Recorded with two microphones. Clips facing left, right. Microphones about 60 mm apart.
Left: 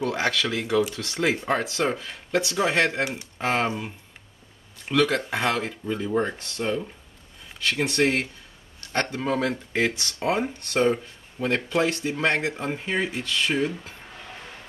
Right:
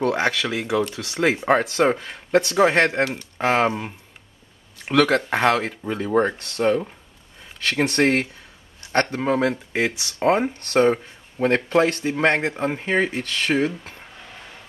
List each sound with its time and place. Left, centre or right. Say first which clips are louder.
0.0 s speech: right 4 dB; right
0.4 s speech: right 1 dB; centre
1.5 s speech: right 6 dB; right
3.3 s speech: right 5 dB; right
4.8 s speech: right 4 dB; right
8.8 s a sound: right 6 dB; centre
9.2 s speech: right 3 dB; right
9.7 s speech: right 1 dB; centre
10.1 s speech: right 9 dB; right
10.6 s speech: right 4 dB; right